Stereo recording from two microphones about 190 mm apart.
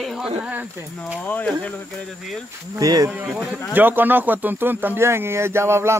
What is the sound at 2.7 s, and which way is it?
Speech, 20° right (ahead or behind).